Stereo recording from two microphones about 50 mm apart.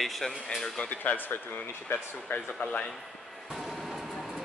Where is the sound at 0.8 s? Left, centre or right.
Left.